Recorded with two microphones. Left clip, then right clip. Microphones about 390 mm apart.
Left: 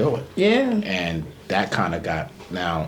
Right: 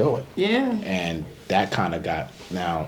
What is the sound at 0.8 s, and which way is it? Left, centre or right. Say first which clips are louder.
Speech: left 2 dB; centre.